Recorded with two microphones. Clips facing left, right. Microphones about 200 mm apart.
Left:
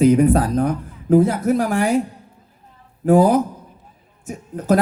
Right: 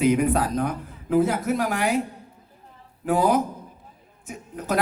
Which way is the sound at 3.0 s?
45° left (ahead or behind).